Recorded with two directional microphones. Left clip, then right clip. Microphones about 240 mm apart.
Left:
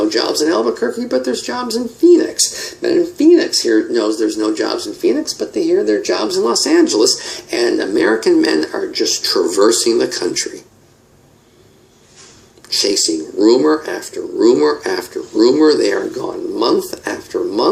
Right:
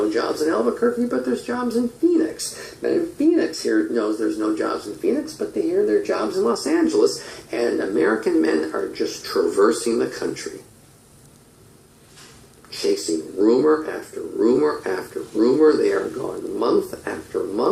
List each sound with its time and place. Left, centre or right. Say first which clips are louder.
0.1 s speech: left 6 dB; left
2.8 s speech: left 7 dB; left
13.4 s speech: left 5 dB; left